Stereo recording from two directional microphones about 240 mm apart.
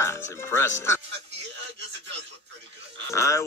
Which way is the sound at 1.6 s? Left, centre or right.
Right.